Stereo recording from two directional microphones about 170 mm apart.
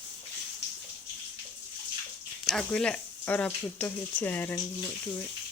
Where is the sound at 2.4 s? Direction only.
Centre (ahead or behind).